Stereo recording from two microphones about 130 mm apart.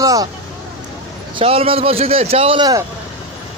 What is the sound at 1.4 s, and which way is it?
A man's voice, 45° right (ahead or behind).